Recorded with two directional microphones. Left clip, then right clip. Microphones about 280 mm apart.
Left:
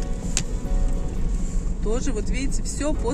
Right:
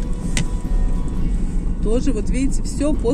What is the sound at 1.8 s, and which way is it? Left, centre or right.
Speech, centre.